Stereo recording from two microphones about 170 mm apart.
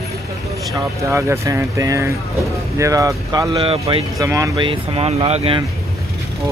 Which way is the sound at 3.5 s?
35° right (ahead or behind).